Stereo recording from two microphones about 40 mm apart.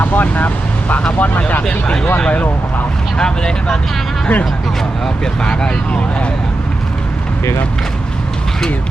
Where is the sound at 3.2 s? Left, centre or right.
Centre.